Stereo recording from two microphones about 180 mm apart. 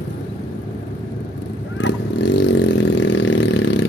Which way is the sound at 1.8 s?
80° left.